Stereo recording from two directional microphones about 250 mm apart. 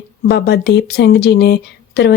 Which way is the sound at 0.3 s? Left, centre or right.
Left.